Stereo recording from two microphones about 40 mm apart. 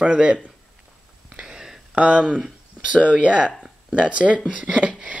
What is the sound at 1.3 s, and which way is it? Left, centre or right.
Whispering, centre.